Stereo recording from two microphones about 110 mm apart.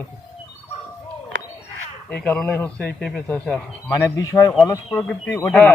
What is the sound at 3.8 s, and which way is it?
Speech, 30° left (ahead or behind).